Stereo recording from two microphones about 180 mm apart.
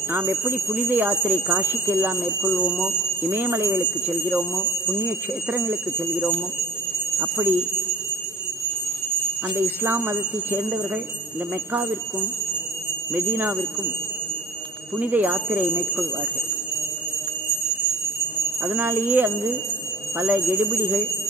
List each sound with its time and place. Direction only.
0.1 s speech: 15° right (ahead or behind)
5.0 s speech: 10° right (ahead or behind)
9.6 s speech: 10° right (ahead or behind)
13.1 s speech: 10° right (ahead or behind)
15.0 s speech: 10° right (ahead or behind)
18.6 s speech: 10° right (ahead or behind)